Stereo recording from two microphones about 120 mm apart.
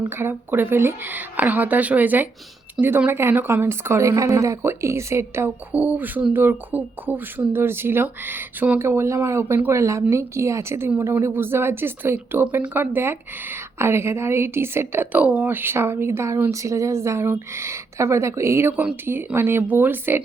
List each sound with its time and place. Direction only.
0.0 s a woman's voice: 20° right (ahead or behind)